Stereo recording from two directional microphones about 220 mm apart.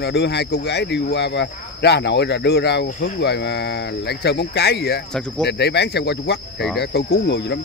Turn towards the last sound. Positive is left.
turn(degrees=50)  # may be behind; listen again after turning